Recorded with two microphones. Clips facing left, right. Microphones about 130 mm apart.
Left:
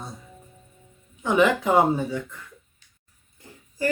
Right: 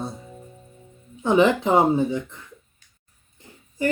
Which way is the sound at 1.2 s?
30° right (ahead or behind).